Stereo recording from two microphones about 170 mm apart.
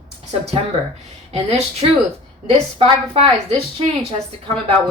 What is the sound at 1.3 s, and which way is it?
A woman's voice, 40° right (ahead or behind).